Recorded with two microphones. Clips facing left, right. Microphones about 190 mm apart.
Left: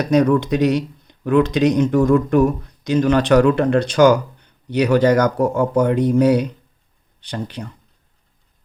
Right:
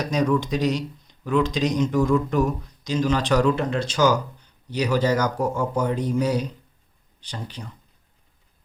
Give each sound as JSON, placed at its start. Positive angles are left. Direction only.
{"t": 0.0, "sound": "speech", "side_deg": 60}